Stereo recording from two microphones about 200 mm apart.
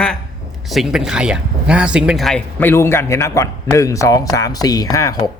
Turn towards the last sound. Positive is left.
turn(degrees=20)  # may be behind; listen again after turning